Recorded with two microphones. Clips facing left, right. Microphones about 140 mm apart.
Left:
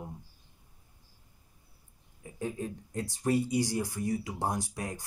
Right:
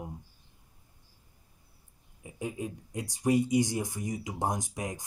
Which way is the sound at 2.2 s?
15° right (ahead or behind).